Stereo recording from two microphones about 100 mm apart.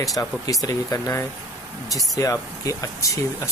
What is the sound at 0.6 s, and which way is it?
Speech, 30° left (ahead or behind).